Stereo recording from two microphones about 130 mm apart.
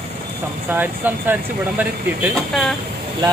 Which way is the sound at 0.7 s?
15° right (ahead or behind).